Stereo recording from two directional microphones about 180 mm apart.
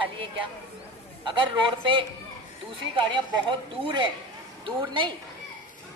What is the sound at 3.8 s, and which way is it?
A woman's voice, 25° right (ahead or behind).